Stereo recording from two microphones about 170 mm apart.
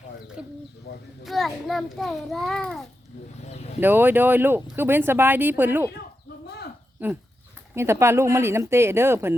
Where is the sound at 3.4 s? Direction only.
40° left (ahead or behind).